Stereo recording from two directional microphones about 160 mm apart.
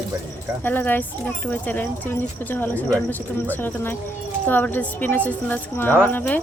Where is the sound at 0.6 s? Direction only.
10° left (ahead or behind).